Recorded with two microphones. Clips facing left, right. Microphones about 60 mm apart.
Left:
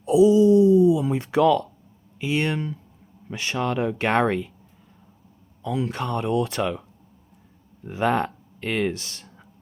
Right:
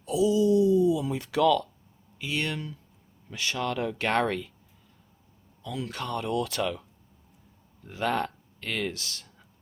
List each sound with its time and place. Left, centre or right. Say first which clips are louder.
0.0 s a sound: left 8 dB; left
2.1 s speech: left 7 dB; left
5.6 s speech: left 7 dB; left
7.9 s speech: left 6 dB; left